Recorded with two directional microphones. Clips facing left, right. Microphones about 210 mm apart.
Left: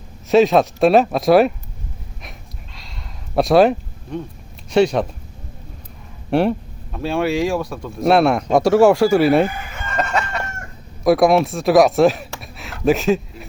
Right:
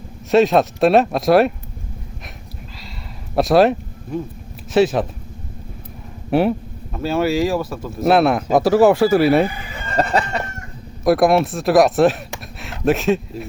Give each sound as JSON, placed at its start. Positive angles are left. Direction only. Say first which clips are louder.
{"t": 0.3, "sound": "speech", "louder": "left 1 dB", "side_deg": 0}
{"t": 3.3, "sound": "speech", "louder": "left 1 dB", "side_deg": 0}
{"t": 6.3, "sound": "speech", "louder": "even", "side_deg": -5}
{"t": 9.5, "sound": "chicken", "louder": "left 2 dB", "side_deg": 50}
{"t": 9.7, "sound": "chicken", "louder": "right 5 dB", "side_deg": -35}
{"t": 11.0, "sound": "speech", "louder": "left 1 dB", "side_deg": 0}
{"t": 12.4, "sound": "a sound", "louder": "right 1 dB", "side_deg": 0}
{"t": 12.8, "sound": "speech", "louder": "left 1 dB", "side_deg": 0}